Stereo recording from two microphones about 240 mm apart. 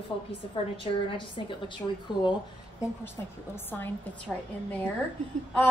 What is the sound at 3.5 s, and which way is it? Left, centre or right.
Speech, centre.